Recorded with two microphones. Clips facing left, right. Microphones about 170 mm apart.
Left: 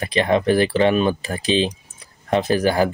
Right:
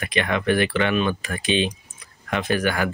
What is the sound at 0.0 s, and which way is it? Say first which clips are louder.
Speech: left 5 dB; 30° left (ahead or behind).